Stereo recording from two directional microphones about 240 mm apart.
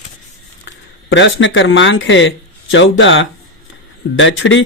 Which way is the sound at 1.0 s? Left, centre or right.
Left.